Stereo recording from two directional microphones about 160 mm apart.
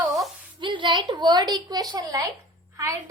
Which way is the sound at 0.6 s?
30° right (ahead or behind).